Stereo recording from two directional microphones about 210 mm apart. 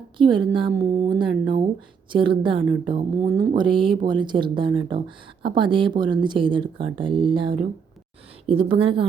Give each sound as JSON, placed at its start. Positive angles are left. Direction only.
{"t": 0.2, "sound": "speech", "side_deg": -25}